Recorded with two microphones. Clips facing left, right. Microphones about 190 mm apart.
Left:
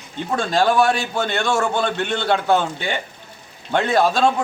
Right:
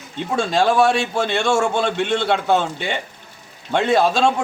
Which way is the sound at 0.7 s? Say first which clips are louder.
Right 1 dB; 25° right (ahead or behind).